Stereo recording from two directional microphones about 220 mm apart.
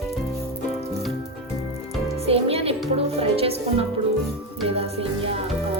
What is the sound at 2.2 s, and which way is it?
Music, 25° right (ahead or behind).